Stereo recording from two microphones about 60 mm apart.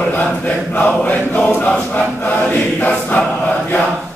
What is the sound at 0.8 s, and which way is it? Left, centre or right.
Choir, centre.